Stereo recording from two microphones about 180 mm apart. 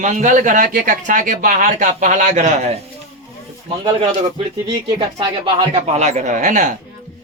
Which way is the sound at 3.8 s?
25° right (ahead or behind).